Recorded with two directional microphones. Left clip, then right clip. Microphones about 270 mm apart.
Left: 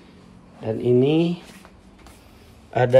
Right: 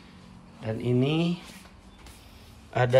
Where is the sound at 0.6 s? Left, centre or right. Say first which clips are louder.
Left 9 dB; right.